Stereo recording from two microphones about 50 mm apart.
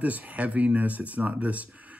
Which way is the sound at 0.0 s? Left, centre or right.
Right.